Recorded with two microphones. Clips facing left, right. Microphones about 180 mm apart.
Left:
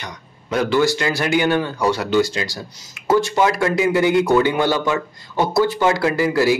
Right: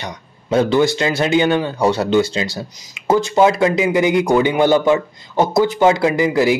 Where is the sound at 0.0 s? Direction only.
25° right (ahead or behind).